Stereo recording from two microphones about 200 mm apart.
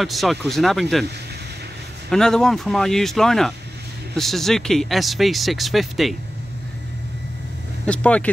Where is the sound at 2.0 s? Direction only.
5° left (ahead or behind).